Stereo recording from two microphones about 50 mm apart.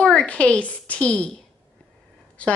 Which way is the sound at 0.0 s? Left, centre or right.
Centre.